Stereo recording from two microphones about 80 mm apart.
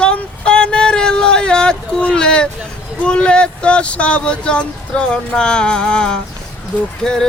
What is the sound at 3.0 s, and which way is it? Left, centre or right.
Speech, centre.